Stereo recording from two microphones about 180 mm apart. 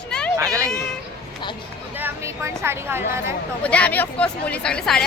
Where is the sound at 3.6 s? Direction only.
5° left (ahead or behind).